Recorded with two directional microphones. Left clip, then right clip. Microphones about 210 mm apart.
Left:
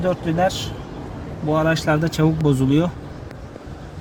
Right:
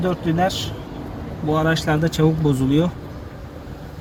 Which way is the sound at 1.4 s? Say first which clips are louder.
Left 1 dB; 45° left (ahead or behind).